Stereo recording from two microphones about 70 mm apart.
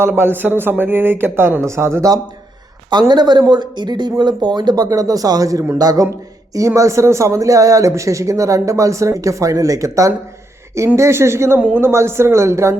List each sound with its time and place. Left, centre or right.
0.2 s speech: right
3.1 s speech: right
6.7 s speech: right